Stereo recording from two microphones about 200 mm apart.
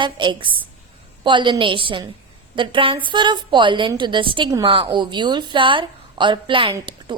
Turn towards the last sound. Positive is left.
turn(degrees=-25)  # may be behind; listen again after turning